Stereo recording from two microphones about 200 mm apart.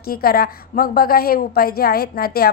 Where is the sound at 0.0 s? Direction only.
50° left (ahead or behind).